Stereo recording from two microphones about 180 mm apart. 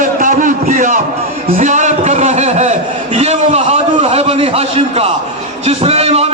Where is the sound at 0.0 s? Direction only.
45° right (ahead or behind).